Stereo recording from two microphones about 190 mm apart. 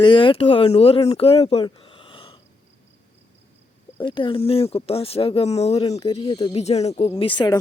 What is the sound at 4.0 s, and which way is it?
A woman's voice, 25° left (ahead or behind).